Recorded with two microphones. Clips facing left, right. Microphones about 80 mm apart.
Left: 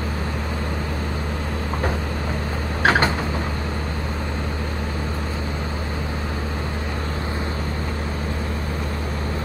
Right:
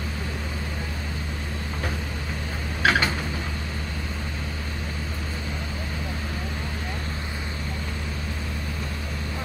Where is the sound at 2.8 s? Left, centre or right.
Left.